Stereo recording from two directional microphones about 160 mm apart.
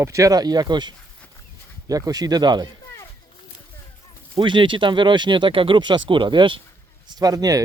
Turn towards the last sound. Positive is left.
turn(degrees=-25)  # may be behind; listen again after turning